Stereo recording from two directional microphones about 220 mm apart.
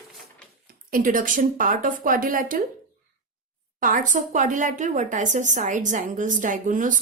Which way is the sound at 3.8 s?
35° right (ahead or behind).